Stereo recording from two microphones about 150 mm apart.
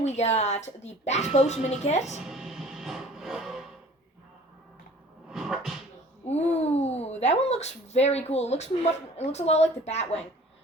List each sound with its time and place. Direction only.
0.0 s speech: 45° left (ahead or behind)
2.2 s music: centre (ahead or behind)
5.3 s a sound: centre (ahead or behind)
6.2 s speech: 45° left (ahead or behind)